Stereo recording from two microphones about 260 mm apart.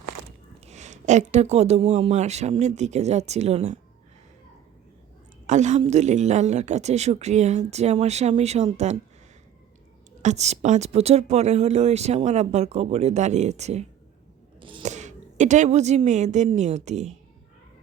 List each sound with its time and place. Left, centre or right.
0.6 s speech: right
5.5 s speech: right
10.2 s speech: right